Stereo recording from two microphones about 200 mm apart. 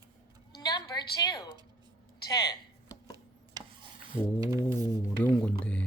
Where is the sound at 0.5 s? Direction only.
20° left (ahead or behind).